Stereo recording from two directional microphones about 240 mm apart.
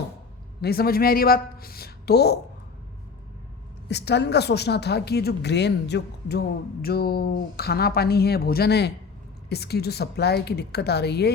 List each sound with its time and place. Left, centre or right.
0.6 s speech: left
3.8 s speech: left